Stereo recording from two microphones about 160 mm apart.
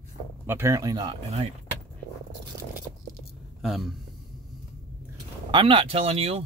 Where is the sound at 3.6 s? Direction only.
Centre (ahead or behind).